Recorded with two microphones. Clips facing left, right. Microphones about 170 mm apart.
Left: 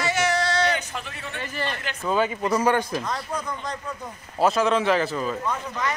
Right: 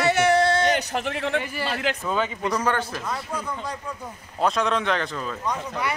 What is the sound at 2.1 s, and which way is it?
Speech, 5° left (ahead or behind).